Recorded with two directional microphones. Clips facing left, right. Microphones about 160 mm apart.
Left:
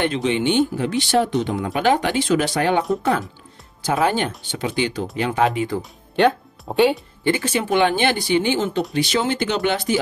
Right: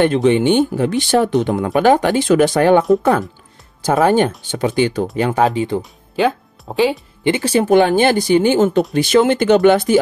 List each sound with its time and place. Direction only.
0.0 s speech: 50° right (ahead or behind)
5.5 s speech: 30° right (ahead or behind)
5.8 s speech: centre (ahead or behind)
7.4 s speech: 40° right (ahead or behind)